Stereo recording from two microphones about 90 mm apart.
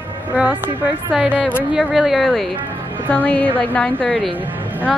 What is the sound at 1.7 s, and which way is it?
Speech, 5° right (ahead or behind).